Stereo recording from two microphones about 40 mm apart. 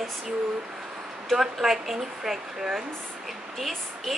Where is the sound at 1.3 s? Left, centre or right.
Centre.